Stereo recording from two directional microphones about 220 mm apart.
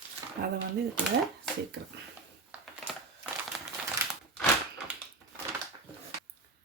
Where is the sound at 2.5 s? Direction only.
5° right (ahead or behind).